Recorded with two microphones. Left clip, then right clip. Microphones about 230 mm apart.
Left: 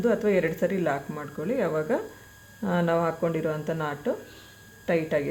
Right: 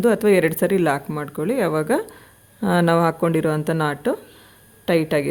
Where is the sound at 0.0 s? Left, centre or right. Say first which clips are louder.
Right 7 dB; right.